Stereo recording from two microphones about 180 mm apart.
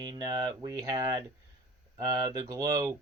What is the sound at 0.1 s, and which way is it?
Speech, 20° right (ahead or behind).